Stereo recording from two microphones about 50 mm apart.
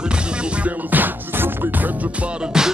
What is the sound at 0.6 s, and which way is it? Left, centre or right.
Music, right.